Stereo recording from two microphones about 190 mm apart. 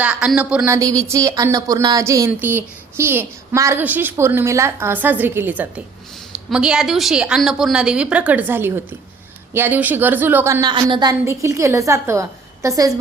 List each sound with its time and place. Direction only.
0.0 s a woman's voice: 5° right (ahead or behind)